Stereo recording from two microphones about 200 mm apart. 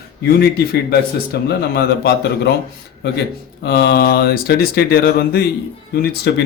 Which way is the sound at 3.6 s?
55° left (ahead or behind).